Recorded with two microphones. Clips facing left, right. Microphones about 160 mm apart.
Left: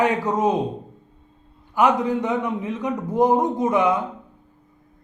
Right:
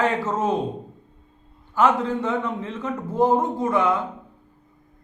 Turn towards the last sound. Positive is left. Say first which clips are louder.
# left 2 dB
turn(degrees=15)  # may be behind; listen again after turning